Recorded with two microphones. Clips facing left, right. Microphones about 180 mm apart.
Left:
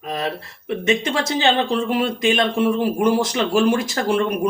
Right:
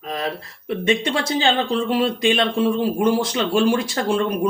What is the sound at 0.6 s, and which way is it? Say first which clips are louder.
A woman's voice: even; 30° right (ahead or behind).